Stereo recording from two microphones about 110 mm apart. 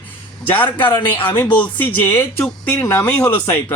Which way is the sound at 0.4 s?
15° left (ahead or behind).